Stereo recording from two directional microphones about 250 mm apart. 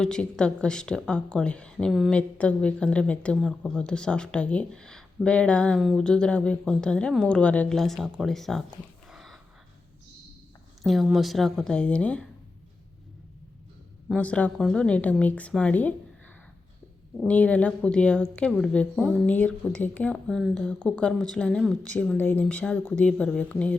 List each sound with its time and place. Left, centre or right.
0.0 s speech: centre
9.0 s a sound: centre
10.8 s speech: centre
14.1 s speech: centre
17.2 s speech: centre